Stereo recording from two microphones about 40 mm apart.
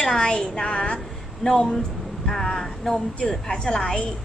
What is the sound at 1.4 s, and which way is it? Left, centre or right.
A woman's voice, centre.